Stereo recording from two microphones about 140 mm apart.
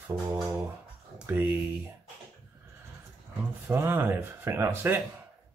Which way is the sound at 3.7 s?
15° right (ahead or behind).